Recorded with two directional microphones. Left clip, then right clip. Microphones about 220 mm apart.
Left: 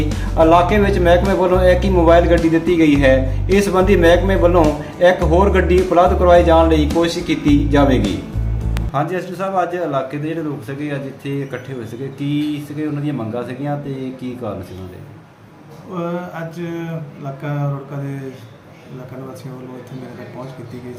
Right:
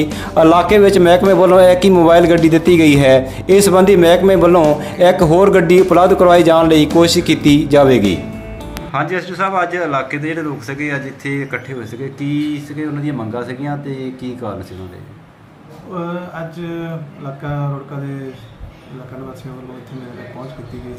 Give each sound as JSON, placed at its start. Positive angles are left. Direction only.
{"t": 0.3, "sound": "a man's voice", "side_deg": -50}
{"t": 8.7, "sound": "music", "side_deg": 5}
{"t": 9.6, "sound": "speech", "side_deg": 0}
{"t": 16.0, "sound": "speech", "side_deg": 0}